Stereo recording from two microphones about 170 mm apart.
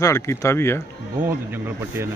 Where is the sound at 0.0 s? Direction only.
15° left (ahead or behind).